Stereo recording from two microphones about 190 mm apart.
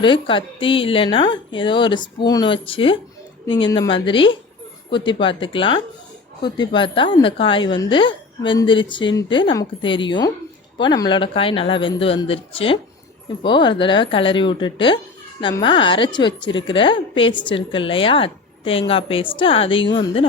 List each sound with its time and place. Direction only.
0.0 s speech: 25° left (ahead or behind)